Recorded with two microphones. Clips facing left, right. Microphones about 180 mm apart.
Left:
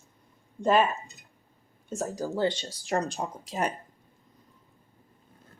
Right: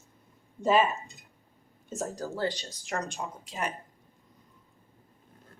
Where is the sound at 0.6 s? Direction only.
Centre (ahead or behind).